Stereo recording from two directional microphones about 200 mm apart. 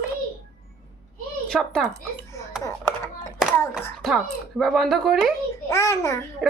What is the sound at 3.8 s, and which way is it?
A woman's voice, centre (ahead or behind).